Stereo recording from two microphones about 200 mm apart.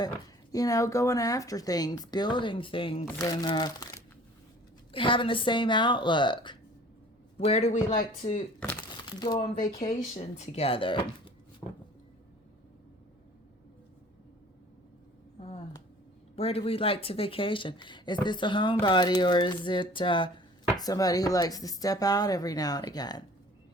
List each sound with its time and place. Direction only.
0.5 s a man's voice: 15° left (ahead or behind); by 8.4 s 35° left (ahead or behind)
9.2 s speech: 20° left (ahead or behind)
9.9 s speech: 35° left (ahead or behind)
11.6 s a sound: 10° left (ahead or behind)
16.3 s speech: 30° left (ahead or behind)